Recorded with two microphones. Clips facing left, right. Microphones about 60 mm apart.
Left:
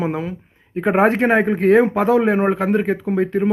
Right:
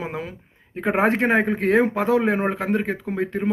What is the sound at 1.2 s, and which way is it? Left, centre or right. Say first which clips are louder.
Speech: left 4 dB; left.